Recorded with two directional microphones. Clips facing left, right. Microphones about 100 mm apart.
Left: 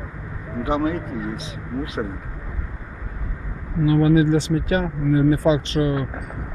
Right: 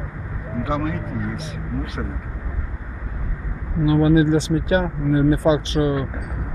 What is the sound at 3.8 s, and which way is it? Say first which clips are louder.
Speech: right 1 dB; 20° right (ahead or behind).